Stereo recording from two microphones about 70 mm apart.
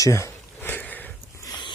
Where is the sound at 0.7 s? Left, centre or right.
Left.